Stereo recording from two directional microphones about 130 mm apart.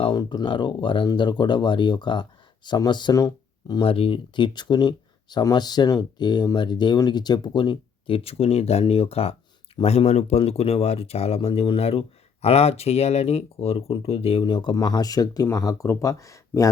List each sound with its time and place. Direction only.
0.0 s speech: 35° left (ahead or behind)
3.8 s speech: 45° left (ahead or behind); by 16.6 s 25° left (ahead or behind)